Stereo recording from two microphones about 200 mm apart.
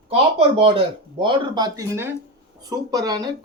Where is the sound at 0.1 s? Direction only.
30° right (ahead or behind).